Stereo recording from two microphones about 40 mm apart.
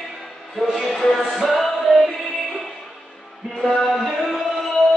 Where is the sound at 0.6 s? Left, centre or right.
Centre.